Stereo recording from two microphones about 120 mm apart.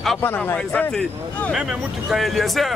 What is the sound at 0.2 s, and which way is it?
Speech, 20° left (ahead or behind).